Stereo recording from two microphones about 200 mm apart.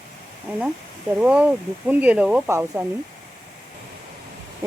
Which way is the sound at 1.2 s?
5° right (ahead or behind).